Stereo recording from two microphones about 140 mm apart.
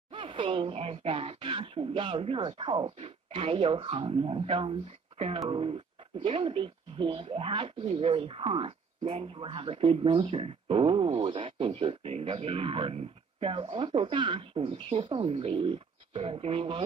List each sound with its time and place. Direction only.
0.1 s speech: 40° right (ahead or behind)